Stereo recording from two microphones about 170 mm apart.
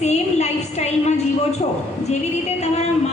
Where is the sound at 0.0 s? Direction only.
40° left (ahead or behind).